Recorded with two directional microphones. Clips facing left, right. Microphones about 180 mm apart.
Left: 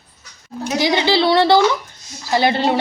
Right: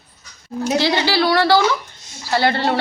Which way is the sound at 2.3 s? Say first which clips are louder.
Left 2 dB; 15° left (ahead or behind).